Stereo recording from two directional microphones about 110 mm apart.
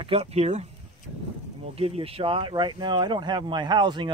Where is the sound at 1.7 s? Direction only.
65° right (ahead or behind); by 4.1 s 45° right (ahead or behind).